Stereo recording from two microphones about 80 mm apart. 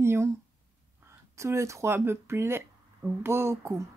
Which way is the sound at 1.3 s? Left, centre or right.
Right.